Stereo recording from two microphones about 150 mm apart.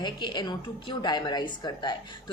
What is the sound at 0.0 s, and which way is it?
Speech, 30° left (ahead or behind).